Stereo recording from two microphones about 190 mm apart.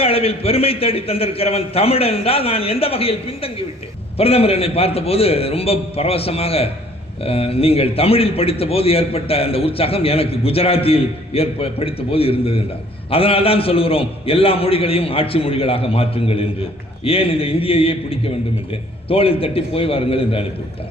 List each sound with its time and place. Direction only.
0.0 s a man's voice: 30° left (ahead or behind)